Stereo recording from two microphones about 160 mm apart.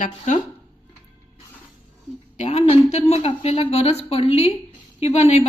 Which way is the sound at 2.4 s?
40° left (ahead or behind).